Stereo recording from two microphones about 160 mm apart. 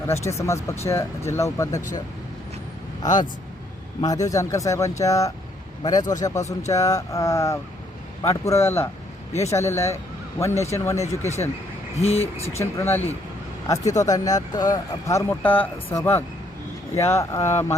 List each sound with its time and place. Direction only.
0.1 s speech: 15° left (ahead or behind)
4.0 s speech: 20° left (ahead or behind)
11.9 s speech: 40° left (ahead or behind)
12.5 s speech: 15° left (ahead or behind)